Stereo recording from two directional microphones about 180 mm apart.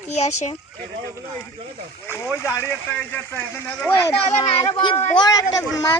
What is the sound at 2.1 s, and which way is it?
Speech, 15° left (ahead or behind).